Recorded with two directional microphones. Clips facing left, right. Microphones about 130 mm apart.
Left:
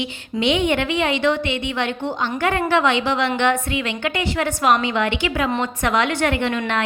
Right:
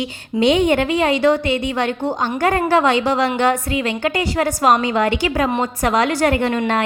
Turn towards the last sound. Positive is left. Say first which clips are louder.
# right 3 dB
turn(degrees=-40)  # may be behind; listen again after turning